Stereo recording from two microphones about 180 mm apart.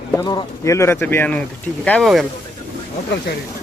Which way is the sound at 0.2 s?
20° left (ahead or behind).